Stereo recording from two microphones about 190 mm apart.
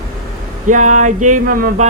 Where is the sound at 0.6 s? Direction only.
40° right (ahead or behind).